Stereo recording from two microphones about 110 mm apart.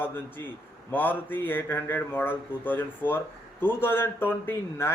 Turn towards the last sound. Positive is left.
turn(degrees=20)  # may be behind; listen again after turning